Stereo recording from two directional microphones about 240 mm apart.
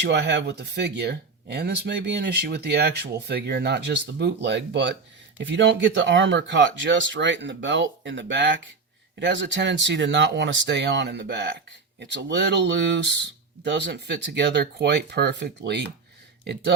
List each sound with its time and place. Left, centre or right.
0.0 s speech: right